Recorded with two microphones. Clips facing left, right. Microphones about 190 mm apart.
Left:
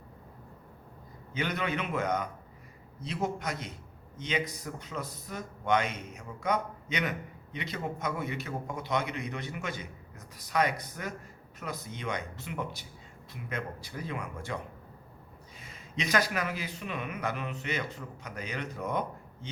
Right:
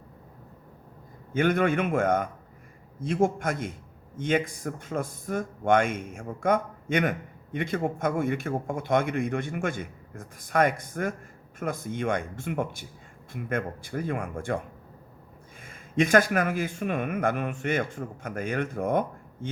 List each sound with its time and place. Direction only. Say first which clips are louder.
1.3 s a man's voice: right 9 dB; 50° right (ahead or behind)
15.6 s a man's voice: right 11 dB; 50° right (ahead or behind)